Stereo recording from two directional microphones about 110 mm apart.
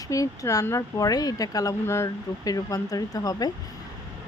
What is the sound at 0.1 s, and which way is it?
Speech, 30° left (ahead or behind).